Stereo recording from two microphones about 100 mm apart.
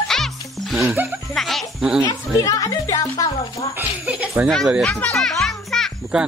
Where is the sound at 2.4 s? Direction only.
35° left (ahead or behind).